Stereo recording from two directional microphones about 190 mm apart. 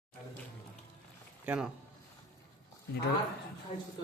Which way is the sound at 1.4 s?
10° right (ahead or behind).